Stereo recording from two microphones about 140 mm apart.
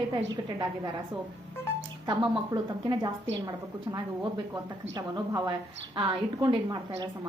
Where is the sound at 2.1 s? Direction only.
35° right (ahead or behind).